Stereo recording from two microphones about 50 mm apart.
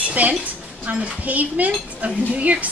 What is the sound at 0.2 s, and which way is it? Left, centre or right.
A woman's voice, right.